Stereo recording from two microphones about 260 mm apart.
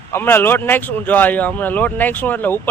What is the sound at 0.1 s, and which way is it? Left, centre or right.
A man's voice, centre.